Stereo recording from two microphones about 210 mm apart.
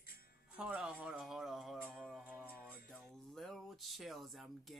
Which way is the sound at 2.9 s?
Centre (ahead or behind).